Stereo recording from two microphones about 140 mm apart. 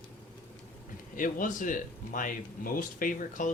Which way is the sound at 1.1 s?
70° left (ahead or behind).